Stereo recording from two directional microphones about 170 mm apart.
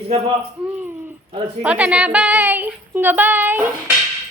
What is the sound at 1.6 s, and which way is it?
Speech, 10° right (ahead or behind).